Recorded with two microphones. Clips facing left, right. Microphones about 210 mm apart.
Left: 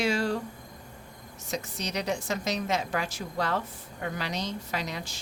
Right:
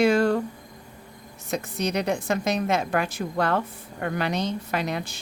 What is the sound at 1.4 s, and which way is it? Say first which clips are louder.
Speech: right 7 dB; 55° right (ahead or behind).